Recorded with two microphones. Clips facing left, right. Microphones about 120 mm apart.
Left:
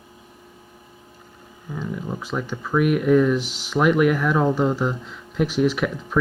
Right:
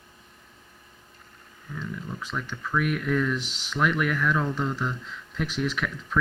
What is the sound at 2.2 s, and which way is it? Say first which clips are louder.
Speech: left 6 dB; 10° left (ahead or behind).